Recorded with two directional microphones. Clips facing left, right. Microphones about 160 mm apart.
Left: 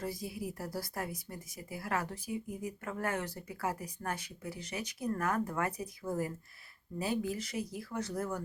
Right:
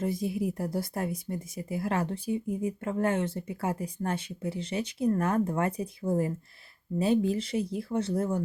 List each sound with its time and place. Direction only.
0.0 s speech: 25° right (ahead or behind)